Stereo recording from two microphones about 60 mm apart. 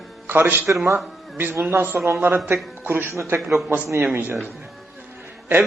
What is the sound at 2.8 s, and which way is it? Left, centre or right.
Speech, right.